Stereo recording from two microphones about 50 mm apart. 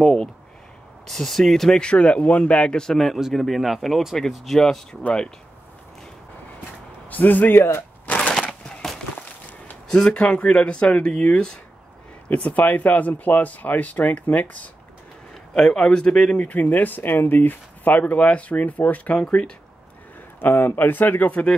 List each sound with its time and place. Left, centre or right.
0.0 s speech: centre
1.8 s speech: left
3.0 s speech: centre
7.1 s a man's voice: left
7.5 s speech: left
9.8 s speech: centre
12.3 s speech: left
15.5 s speech: centre; by 19.1 s left
19.1 s speech: centre
20.3 s speech: left
21.3 s speech: left